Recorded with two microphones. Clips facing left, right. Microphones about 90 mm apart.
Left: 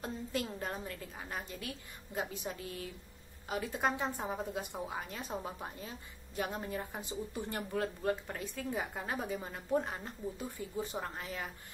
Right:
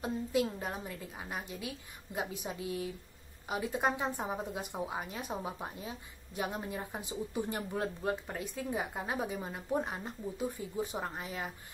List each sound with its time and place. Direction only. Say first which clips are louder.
0.0 s speech: right 6 dB; 10° right (ahead or behind)